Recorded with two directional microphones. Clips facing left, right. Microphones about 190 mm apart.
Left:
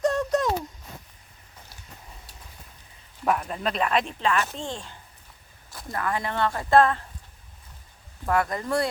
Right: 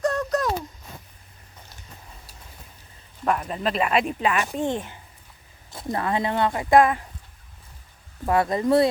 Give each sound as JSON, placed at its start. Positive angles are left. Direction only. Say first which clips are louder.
{"t": 0.0, "sound": "a sound", "louder": "even", "side_deg": 25}
{"t": 3.2, "sound": "speech", "louder": "right 1 dB", "side_deg": 0}
{"t": 8.3, "sound": "speech", "louder": "right 5 dB", "side_deg": -20}